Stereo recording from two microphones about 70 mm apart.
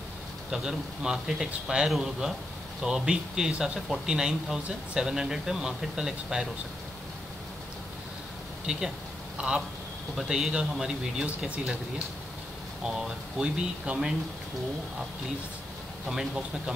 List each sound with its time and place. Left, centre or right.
0.5 s speech: centre
8.7 s speech: centre
12.8 s speech: centre
13.9 s speech: right
16.1 s speech: centre